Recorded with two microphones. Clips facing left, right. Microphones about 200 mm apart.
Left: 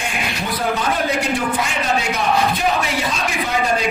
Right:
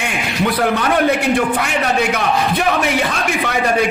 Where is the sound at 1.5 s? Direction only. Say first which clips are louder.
Right 3 dB; 60° right (ahead or behind).